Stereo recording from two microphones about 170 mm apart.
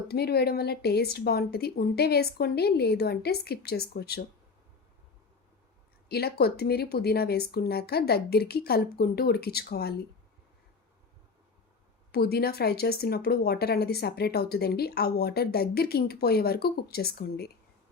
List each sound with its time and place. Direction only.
0.1 s speech: 70° left (ahead or behind)
6.1 s speech: 70° left (ahead or behind)
12.1 s speech: 65° left (ahead or behind)